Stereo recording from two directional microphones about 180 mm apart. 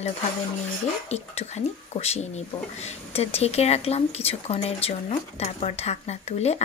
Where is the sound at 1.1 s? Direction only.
40° left (ahead or behind).